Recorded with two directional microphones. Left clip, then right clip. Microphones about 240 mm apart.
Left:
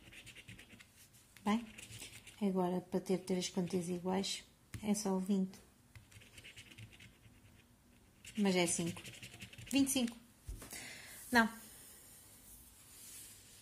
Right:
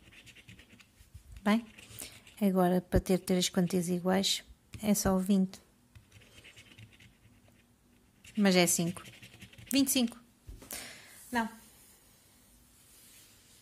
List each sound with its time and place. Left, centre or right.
0.0 s scratch: centre
1.6 s a sound: centre
2.3 s a woman's voice: right
6.1 s scratch: centre
8.4 s a woman's voice: right
9.0 s dog: centre
9.7 s speech: right
10.7 s a sound: right
11.0 s a sound: centre